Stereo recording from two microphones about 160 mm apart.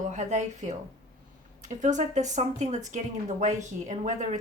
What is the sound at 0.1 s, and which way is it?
Speech, 50° right (ahead or behind).